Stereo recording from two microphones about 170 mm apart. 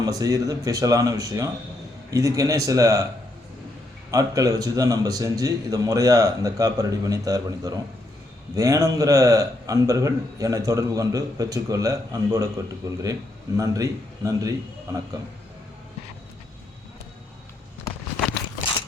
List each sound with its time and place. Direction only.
0.0 s a man's voice: 20° right (ahead or behind)
4.1 s a man's voice: 20° right (ahead or behind)